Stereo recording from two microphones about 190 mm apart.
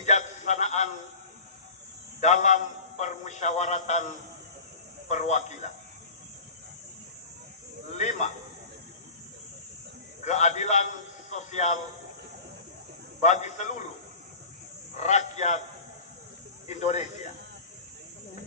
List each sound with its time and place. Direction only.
0.0 s a sound: 40° left (ahead or behind)
2.2 s a man's voice: 40° left (ahead or behind)
8.0 s a man's voice: 35° left (ahead or behind)
10.2 s a man's voice: 35° left (ahead or behind)
13.2 s a man's voice: 40° left (ahead or behind)
15.0 s a man's voice: 35° left (ahead or behind)
16.6 s speech: 35° left (ahead or behind)